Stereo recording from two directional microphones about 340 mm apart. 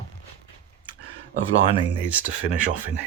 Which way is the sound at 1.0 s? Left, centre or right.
Left.